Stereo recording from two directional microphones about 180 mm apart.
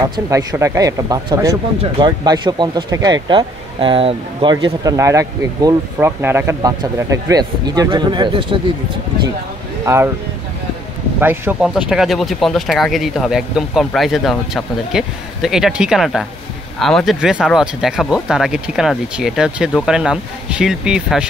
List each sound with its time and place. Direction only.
0.1 s speech: 20° right (ahead or behind)
11.1 s speech: 10° right (ahead or behind)